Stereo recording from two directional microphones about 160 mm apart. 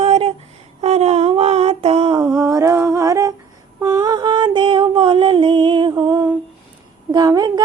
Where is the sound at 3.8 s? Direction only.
25° right (ahead or behind).